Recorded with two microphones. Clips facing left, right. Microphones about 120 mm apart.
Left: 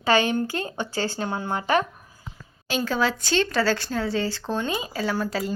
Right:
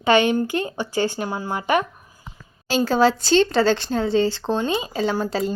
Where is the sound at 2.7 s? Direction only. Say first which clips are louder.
Right 6 dB; 30° right (ahead or behind).